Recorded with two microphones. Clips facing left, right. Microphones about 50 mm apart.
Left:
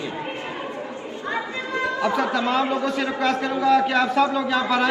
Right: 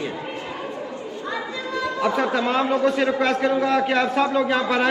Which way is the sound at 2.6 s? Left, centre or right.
Right.